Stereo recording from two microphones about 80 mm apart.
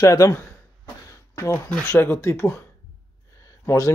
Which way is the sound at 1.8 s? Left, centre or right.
Left.